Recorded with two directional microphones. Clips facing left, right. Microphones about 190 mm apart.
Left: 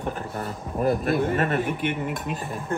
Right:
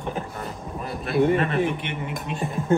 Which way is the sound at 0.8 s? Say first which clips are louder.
Even; 50° left (ahead or behind).